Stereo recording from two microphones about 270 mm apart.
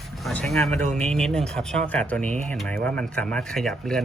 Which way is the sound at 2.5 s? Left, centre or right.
Centre.